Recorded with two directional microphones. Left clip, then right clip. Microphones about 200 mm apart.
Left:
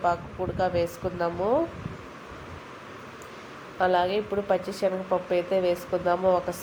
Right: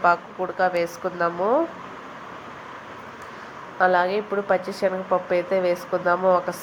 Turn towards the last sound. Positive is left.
turn(degrees=-5)  # may be behind; listen again after turning